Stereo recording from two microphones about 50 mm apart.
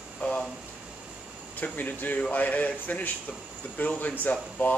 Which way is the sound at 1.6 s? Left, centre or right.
Left.